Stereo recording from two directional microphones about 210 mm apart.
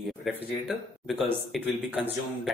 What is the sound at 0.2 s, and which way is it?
Speech, centre (ahead or behind).